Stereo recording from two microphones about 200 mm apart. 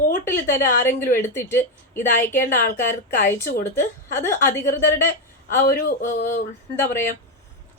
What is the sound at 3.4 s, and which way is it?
Speech, 45° left (ahead or behind).